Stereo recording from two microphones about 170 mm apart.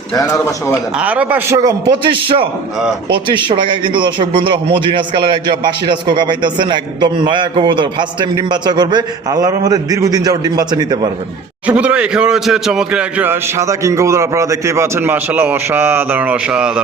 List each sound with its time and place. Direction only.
0.2 s a man's voice: 15° left (ahead or behind)
0.9 s a man's voice: 10° right (ahead or behind); by 11.1 s 25° right (ahead or behind)
11.6 s a man's voice: 5° right (ahead or behind)